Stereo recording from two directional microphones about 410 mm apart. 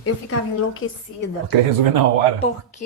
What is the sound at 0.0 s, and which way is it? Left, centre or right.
Speech, left.